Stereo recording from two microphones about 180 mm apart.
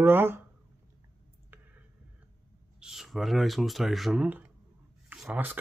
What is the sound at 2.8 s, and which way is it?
Speech, centre (ahead or behind).